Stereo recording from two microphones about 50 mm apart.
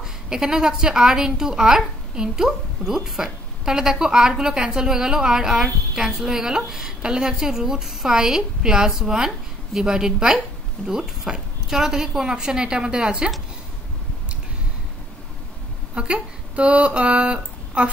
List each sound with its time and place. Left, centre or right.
0.0 s a woman's voice: centre
15.9 s speech: centre